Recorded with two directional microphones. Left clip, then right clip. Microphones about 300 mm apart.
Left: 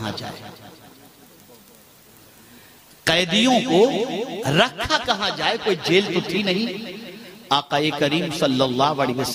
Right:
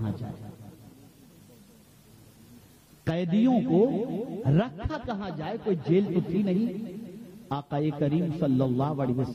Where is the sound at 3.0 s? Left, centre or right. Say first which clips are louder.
Left 10 dB; centre.